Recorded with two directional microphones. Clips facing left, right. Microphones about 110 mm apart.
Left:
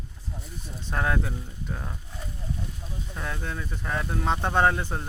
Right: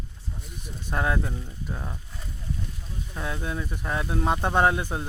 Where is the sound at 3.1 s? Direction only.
10° right (ahead or behind).